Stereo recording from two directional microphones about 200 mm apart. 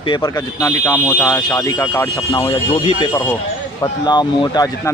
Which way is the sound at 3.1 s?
10° left (ahead or behind).